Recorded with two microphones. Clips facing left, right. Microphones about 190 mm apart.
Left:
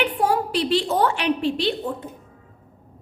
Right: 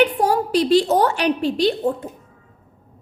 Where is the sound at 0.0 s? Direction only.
40° right (ahead or behind).